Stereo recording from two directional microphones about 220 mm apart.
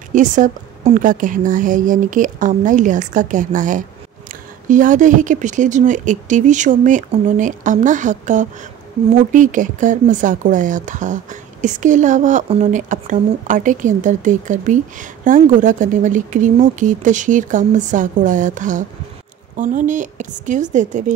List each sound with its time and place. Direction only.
0.1 s speech: 35° right (ahead or behind)